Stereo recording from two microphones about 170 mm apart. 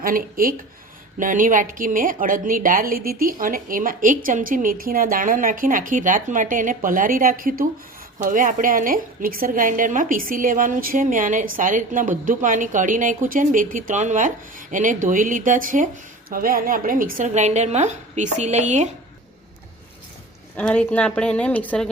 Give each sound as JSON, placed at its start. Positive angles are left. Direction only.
{"t": 0.0, "sound": "a woman's voice", "side_deg": -55}
{"t": 20.6, "sound": "a woman's voice", "side_deg": 10}